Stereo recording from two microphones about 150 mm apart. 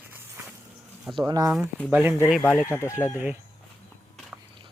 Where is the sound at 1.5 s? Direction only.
Centre (ahead or behind).